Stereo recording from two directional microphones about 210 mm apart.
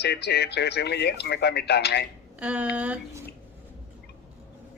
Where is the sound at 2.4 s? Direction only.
5° right (ahead or behind).